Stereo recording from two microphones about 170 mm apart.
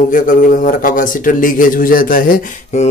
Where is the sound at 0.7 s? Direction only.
55° left (ahead or behind).